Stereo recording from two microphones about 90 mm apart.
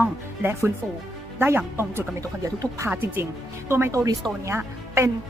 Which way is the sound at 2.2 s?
40° right (ahead or behind).